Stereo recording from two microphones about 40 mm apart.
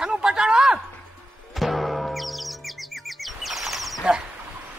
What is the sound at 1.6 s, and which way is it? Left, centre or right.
Chirp, centre.